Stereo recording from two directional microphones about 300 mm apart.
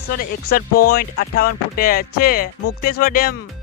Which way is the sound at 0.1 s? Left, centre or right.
Left.